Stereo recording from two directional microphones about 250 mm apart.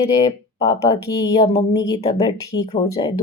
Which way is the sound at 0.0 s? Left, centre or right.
Centre.